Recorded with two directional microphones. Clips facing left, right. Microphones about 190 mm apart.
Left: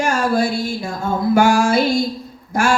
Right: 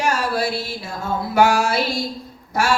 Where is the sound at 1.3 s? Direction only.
50° left (ahead or behind).